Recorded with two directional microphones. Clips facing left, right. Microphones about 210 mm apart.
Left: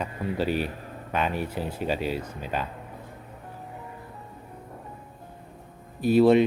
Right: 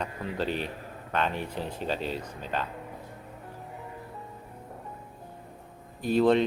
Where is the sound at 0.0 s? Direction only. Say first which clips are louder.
Left 4 dB; 10° left (ahead or behind).